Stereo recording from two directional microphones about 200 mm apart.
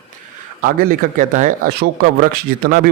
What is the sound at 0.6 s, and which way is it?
A man's voice, 45° right (ahead or behind).